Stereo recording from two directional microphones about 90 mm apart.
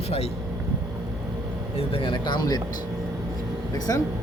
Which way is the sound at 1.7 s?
80° left.